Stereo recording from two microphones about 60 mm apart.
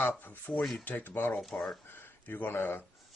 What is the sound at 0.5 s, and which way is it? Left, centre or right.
Speech, centre.